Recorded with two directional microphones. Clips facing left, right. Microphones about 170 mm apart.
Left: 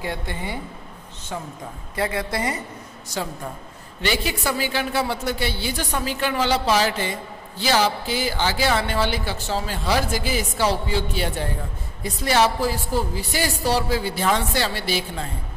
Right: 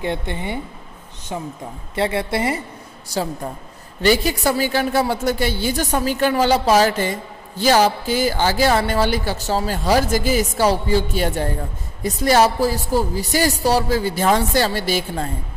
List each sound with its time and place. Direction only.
0.0 s a woman's voice: 20° right (ahead or behind)
4.0 s a woman's voice: 40° right (ahead or behind)